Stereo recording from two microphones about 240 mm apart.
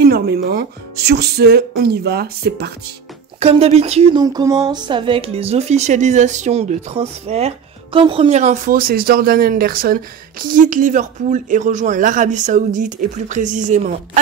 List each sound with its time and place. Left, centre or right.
0.0 s speech: right
3.3 s speech: right